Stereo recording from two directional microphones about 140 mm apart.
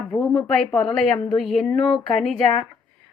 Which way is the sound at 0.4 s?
5° left (ahead or behind).